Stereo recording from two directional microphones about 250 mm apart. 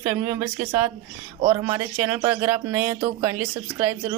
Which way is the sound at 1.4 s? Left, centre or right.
Centre.